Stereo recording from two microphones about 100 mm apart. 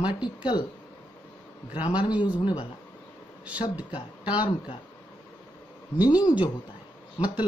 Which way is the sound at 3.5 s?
15° right (ahead or behind).